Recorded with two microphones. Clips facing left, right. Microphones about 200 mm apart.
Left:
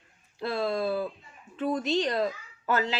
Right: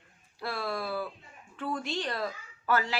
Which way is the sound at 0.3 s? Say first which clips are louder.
Left 6 dB; 20° left (ahead or behind).